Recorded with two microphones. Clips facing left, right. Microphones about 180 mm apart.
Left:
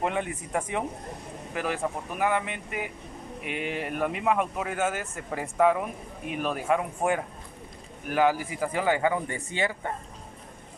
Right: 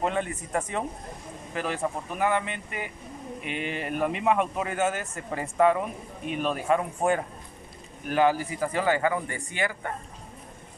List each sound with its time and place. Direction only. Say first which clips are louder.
0.0 s speech: right 1 dB; 10° left (ahead or behind)